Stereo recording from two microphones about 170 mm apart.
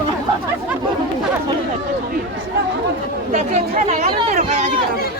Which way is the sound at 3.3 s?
40° right (ahead or behind).